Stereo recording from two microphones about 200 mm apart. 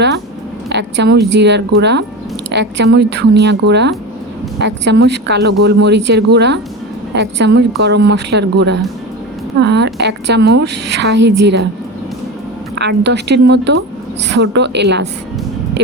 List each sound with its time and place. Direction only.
0.7 s a woman's voice: 60° right (ahead or behind)
12.7 s a woman's voice: 60° right (ahead or behind)